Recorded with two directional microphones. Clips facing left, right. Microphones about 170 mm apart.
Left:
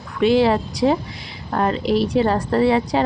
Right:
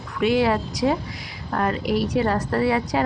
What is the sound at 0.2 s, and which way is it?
A woman's voice, 30° left (ahead or behind).